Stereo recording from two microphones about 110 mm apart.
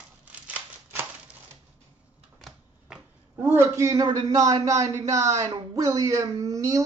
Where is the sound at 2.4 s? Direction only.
5° right (ahead or behind).